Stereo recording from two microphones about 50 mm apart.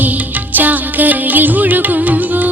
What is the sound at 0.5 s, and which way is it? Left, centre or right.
Music, right.